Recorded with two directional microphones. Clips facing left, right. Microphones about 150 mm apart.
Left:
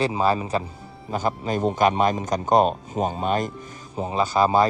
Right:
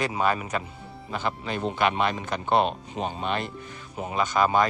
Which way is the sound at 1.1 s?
40° left (ahead or behind).